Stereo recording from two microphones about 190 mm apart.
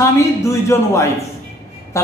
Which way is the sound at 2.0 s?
15° left (ahead or behind).